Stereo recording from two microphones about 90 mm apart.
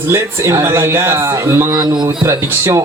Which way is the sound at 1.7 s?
55° right (ahead or behind).